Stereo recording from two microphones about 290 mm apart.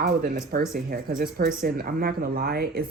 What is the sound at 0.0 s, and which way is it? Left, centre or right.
A woman's voice, right.